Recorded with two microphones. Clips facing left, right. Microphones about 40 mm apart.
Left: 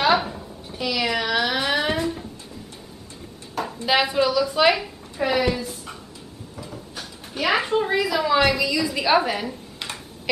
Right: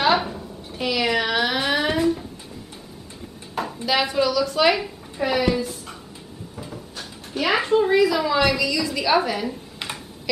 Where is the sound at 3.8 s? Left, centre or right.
Centre.